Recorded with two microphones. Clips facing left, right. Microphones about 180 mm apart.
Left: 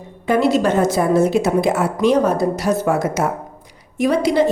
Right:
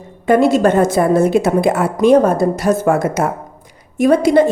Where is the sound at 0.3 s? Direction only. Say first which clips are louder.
Right 4 dB; 50° right (ahead or behind).